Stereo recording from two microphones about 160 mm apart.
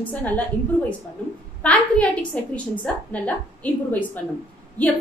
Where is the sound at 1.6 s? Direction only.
10° left (ahead or behind).